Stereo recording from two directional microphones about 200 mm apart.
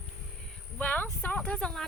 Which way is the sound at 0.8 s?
10° left (ahead or behind).